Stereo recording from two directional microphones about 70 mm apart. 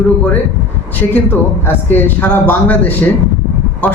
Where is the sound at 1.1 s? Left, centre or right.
Left.